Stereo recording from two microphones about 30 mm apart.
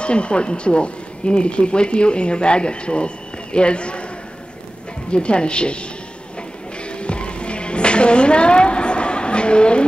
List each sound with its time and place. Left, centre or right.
0.0 s speech: left
5.1 s speech: left
6.8 s music: left